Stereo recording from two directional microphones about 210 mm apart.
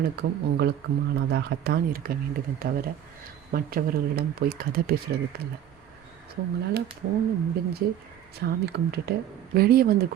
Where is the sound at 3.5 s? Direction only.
45° right (ahead or behind).